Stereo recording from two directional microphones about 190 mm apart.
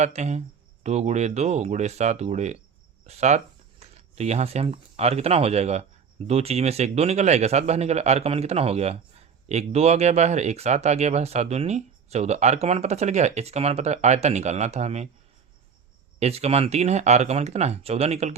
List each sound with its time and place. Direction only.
0.0 s a man's voice: 35° right (ahead or behind)
16.2 s a man's voice: 35° right (ahead or behind)